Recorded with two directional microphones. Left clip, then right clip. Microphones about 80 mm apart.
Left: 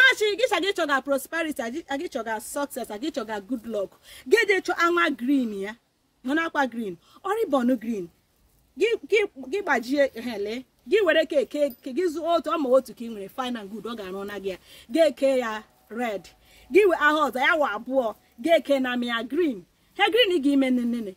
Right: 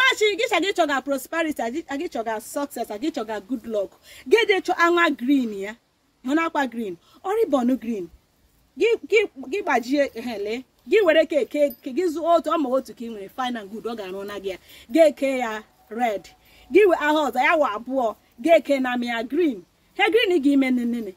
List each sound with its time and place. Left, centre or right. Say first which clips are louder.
0.0 s speech: even; left
12.6 s speech: left 3 dB; left